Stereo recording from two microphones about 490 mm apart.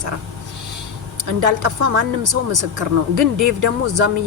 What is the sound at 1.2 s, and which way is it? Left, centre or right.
Speech, right.